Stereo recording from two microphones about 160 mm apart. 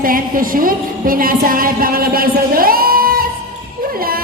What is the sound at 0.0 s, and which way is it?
A woman's voice, 60° right (ahead or behind).